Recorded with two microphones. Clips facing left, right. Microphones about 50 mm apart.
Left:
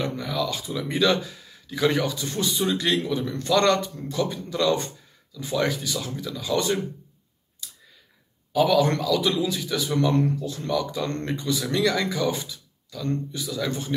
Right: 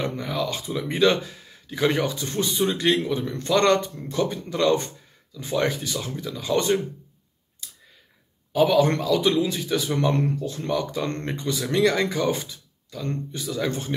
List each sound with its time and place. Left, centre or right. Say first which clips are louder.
0.0 s speech: even; right
8.5 s speech: right 1 dB; right